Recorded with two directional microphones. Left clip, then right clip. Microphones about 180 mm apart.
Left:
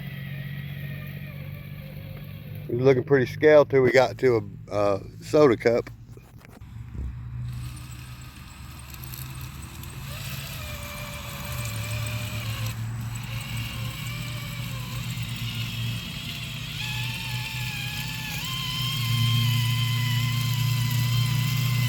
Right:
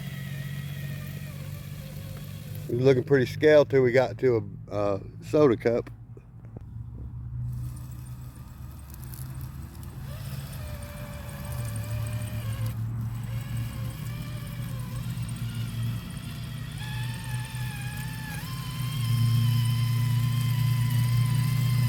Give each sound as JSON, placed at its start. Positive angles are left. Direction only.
{"t": 0.0, "sound": "vehicle", "side_deg": -15}
{"t": 2.7, "sound": "speech", "side_deg": -10}
{"t": 10.1, "sound": "vehicle", "side_deg": -15}
{"t": 12.4, "sound": "vehicle", "side_deg": -15}